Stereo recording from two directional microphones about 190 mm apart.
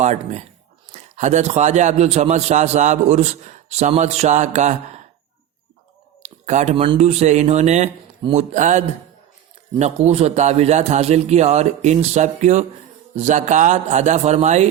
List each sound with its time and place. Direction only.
0.0 s a man's voice: 35° right (ahead or behind)
6.2 s a man's voice: 40° right (ahead or behind)